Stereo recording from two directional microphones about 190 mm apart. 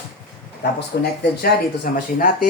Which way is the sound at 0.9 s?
60° left (ahead or behind).